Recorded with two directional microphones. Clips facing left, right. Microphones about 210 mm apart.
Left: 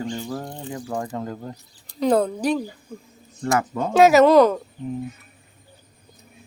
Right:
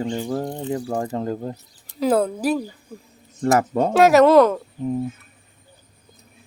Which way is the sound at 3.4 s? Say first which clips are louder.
Right 5 dB; 30° right (ahead or behind).